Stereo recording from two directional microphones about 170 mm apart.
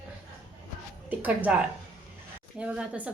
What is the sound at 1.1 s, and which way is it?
Speech, 10° right (ahead or behind).